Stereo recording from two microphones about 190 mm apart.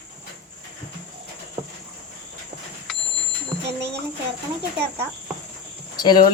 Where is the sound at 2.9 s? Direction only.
5° left (ahead or behind).